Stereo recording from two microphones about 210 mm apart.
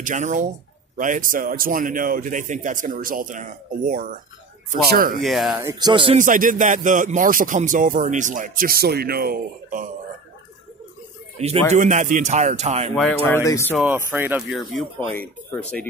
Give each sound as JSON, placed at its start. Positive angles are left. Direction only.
{"t": 0.0, "sound": "speech", "side_deg": -35}
{"t": 5.2, "sound": "speech", "side_deg": 0}
{"t": 5.7, "sound": "speech", "side_deg": -20}
{"t": 6.1, "sound": "speech", "side_deg": -40}
{"t": 11.3, "sound": "speech", "side_deg": -30}
{"t": 13.3, "sound": "speech", "side_deg": 15}
{"t": 13.7, "sound": "speech", "side_deg": -5}